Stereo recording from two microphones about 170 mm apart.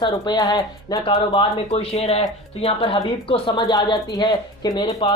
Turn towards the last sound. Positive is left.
turn(degrees=30)  # may be behind; listen again after turning